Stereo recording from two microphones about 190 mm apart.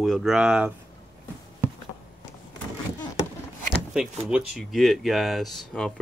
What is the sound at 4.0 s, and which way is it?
Speech, 5° right (ahead or behind).